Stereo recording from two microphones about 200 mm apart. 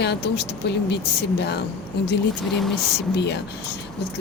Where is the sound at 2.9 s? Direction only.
60° left (ahead or behind).